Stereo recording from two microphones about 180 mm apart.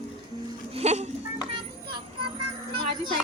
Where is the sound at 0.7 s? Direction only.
35° right (ahead or behind).